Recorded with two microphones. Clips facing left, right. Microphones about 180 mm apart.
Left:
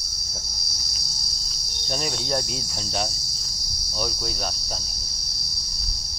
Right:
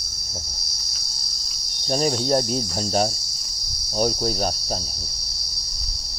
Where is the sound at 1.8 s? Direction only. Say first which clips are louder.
Right 8 dB; 40° right (ahead or behind).